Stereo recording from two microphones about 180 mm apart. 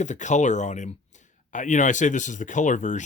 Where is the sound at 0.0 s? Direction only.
40° left (ahead or behind).